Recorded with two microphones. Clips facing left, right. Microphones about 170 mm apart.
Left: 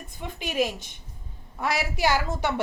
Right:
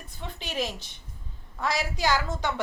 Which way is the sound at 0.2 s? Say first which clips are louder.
Left 5 dB; 10° left (ahead or behind).